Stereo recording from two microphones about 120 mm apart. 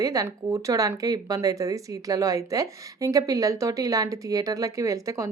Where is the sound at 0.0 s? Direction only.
30° right (ahead or behind).